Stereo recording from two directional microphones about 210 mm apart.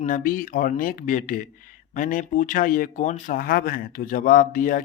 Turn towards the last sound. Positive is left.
turn(degrees=40)  # may be behind; listen again after turning